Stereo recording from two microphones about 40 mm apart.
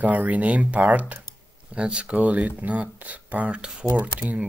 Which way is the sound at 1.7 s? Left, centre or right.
Right.